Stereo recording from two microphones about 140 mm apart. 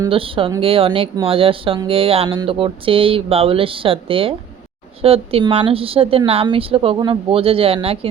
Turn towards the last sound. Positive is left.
turn(degrees=-45)  # may be behind; listen again after turning